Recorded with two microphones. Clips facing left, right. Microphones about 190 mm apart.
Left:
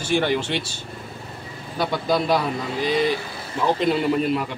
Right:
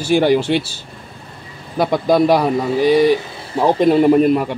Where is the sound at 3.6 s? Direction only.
45° right (ahead or behind).